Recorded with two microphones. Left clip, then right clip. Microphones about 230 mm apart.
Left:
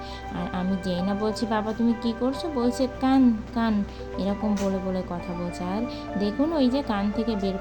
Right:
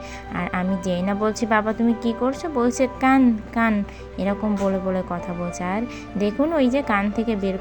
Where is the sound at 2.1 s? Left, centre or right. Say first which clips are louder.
Right 4 dB; right.